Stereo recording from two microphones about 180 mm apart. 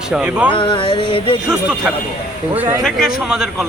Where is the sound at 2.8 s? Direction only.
Centre (ahead or behind).